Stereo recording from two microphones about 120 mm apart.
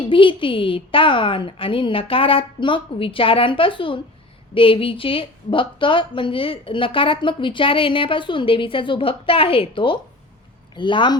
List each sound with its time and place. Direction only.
0.1 s a woman's voice: 45° left (ahead or behind)